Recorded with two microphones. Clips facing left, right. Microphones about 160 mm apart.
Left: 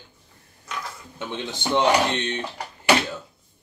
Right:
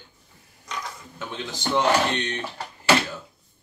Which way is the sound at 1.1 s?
25° left (ahead or behind).